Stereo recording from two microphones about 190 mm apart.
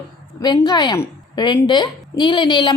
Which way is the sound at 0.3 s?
20° left (ahead or behind).